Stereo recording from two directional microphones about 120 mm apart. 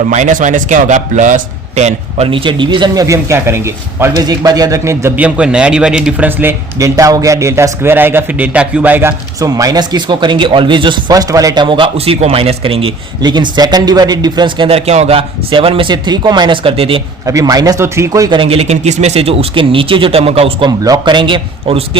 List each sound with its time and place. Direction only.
0.1 s a man's voice: 90° right
2.2 s a man's voice: 45° right (ahead or behind); by 4.1 s 20° right (ahead or behind)
4.1 s a man's voice: 30° right (ahead or behind); by 9.1 s 15° right (ahead or behind)
9.4 s speech: 30° right (ahead or behind); by 12.9 s 50° right (ahead or behind)
13.2 s speech: 35° right (ahead or behind)
14.7 s a man's voice: 60° right (ahead or behind)
17.2 s a man's voice: 30° right (ahead or behind)
18.3 s speech: 50° right (ahead or behind)
20.7 s a man's voice: 30° right (ahead or behind); by 21.8 s 50° right (ahead or behind)